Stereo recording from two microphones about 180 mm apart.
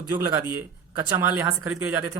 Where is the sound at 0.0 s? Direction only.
20° right (ahead or behind).